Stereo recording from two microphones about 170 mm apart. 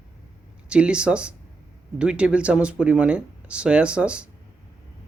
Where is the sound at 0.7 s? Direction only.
5° right (ahead or behind).